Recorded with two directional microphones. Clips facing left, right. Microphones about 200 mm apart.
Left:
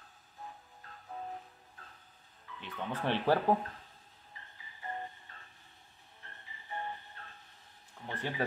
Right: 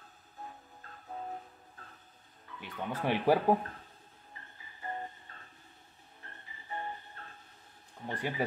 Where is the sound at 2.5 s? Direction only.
10° right (ahead or behind).